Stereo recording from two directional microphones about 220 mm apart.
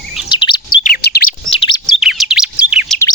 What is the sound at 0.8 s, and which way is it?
Chirp, 45° left (ahead or behind).